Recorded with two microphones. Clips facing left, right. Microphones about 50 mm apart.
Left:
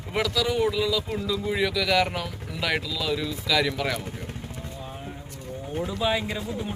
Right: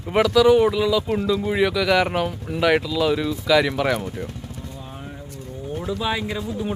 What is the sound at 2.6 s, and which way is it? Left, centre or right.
Speech, centre.